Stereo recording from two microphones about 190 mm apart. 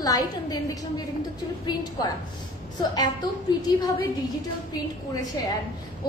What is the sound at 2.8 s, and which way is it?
A woman's voice, 20° left (ahead or behind).